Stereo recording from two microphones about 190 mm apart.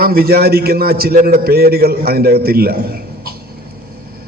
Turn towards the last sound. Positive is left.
turn(degrees=-55)  # may be behind; listen again after turning